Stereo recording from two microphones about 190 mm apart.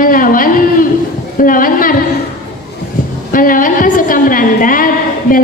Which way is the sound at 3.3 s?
45° left (ahead or behind).